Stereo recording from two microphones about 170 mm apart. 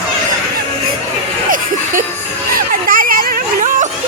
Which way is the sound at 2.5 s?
55° right (ahead or behind).